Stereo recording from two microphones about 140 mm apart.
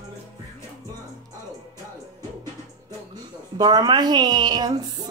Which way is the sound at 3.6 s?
30° right (ahead or behind).